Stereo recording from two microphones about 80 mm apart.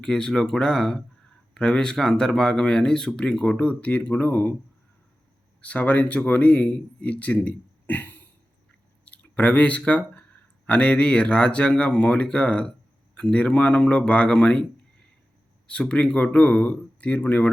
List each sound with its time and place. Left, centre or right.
0.0 s speech: centre
5.6 s speech: centre